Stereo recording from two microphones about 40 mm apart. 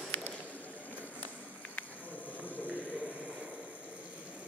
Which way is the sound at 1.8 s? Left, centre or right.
Left.